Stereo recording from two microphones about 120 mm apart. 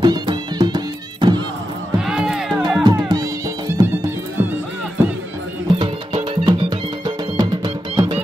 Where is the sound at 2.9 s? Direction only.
30° right (ahead or behind).